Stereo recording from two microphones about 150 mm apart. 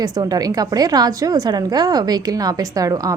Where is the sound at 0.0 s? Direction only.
25° right (ahead or behind).